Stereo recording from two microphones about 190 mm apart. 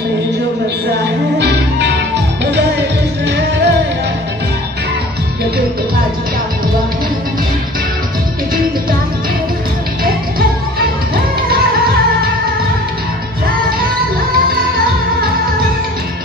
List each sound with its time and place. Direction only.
1.4 s music: 60° right (ahead or behind)
3.3 s music: 65° right (ahead or behind)